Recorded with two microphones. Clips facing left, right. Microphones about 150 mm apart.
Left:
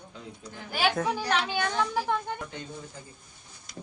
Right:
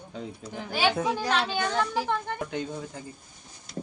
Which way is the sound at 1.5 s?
10° left (ahead or behind).